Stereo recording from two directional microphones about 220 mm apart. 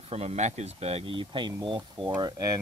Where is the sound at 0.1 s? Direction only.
30° right (ahead or behind).